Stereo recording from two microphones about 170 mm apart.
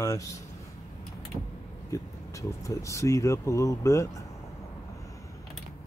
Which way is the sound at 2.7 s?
15° left (ahead or behind).